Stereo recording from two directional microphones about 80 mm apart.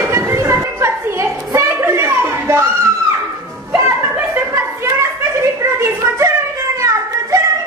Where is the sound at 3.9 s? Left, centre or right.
Right.